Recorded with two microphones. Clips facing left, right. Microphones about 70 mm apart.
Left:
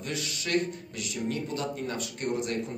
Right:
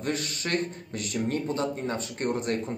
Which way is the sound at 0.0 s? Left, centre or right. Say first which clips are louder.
Right 4 dB; right.